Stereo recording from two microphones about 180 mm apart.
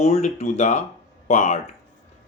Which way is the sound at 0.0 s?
40° left (ahead or behind).